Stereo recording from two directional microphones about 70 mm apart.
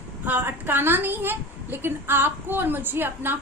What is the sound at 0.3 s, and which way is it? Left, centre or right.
A woman's voice, right.